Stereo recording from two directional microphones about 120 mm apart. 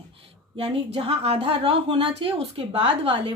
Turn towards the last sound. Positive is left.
turn(degrees=-50)  # may be behind; listen again after turning